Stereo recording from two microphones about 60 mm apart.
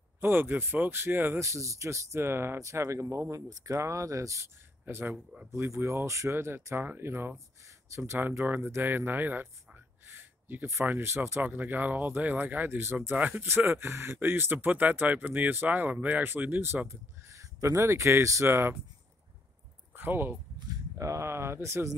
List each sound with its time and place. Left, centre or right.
0.2 s speech: right
1.4 s speech: right
2.6 s speech: right
4.8 s speech: right
5.1 s speech: centre
5.5 s speech: right
10.1 s a sound: right
11.0 s speech: right
11.4 s speech: right
13.1 s speech: right
13.5 s speech: right
19.9 s a sound: right
20.6 s speech: right